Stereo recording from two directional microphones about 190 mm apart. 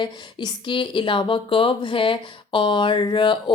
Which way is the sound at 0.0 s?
25° left (ahead or behind).